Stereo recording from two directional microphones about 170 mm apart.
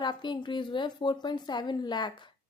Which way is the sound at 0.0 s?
25° left (ahead or behind).